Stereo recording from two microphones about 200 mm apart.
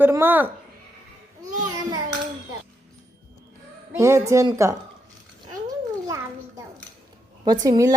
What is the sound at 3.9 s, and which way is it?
Speech, 15° right (ahead or behind).